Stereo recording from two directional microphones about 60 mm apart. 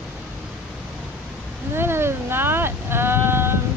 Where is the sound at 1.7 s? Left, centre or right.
Right.